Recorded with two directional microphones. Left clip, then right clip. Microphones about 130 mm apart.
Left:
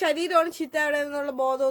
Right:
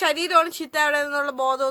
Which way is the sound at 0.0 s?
15° left (ahead or behind).